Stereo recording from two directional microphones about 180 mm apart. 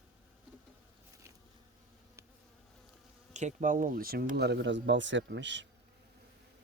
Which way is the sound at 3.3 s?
40° right (ahead or behind).